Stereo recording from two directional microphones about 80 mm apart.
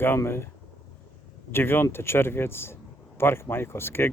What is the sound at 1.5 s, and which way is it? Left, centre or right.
Speech, left.